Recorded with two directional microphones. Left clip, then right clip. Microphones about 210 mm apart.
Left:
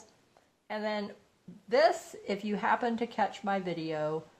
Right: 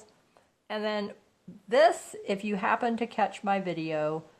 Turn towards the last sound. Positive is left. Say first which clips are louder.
# right 3 dB
turn(degrees=-35)  # may be behind; listen again after turning